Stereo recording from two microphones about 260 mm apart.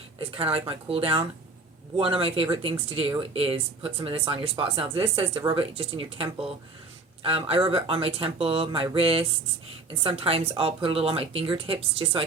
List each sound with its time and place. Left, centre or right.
0.2 s speech: right